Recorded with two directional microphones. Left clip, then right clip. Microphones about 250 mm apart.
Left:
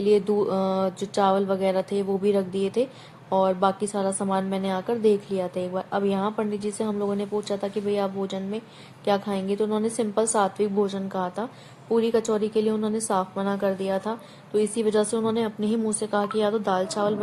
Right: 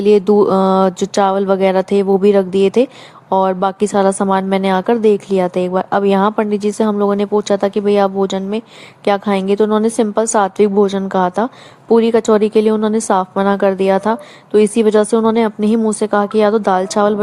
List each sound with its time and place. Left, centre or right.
0.0 s a woman's voice: right